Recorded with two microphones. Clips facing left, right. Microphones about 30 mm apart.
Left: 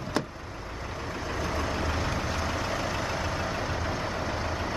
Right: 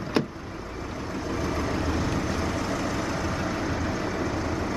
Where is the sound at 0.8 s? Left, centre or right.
Centre.